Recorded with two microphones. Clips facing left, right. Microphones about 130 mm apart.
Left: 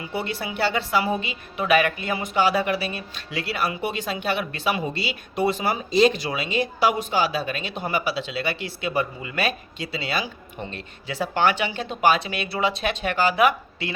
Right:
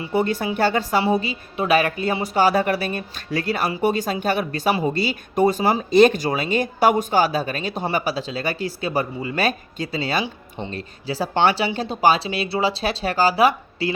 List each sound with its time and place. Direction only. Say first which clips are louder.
0.1 s a woman's voice: right 9 dB; 45° right (ahead or behind)
5.9 s a woman's voice: right 4 dB; 55° right (ahead or behind); by 13.9 s 35° right (ahead or behind)